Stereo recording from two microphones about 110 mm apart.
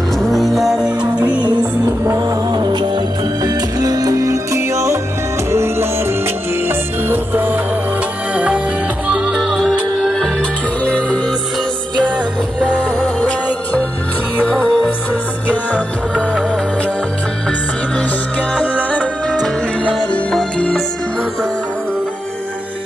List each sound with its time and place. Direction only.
0.3 s music: centre (ahead or behind)
1.4 s music: 35° right (ahead or behind); by 7.6 s 15° right (ahead or behind)
9.0 s music: 10° right (ahead or behind); by 11.3 s 10° left (ahead or behind)
13.2 s music of bollywood: 10° left (ahead or behind)
14.4 s music: 10° left (ahead or behind)
18.5 s music: 10° left (ahead or behind)